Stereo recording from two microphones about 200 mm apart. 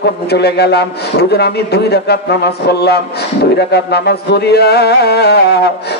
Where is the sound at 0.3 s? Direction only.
55° left (ahead or behind).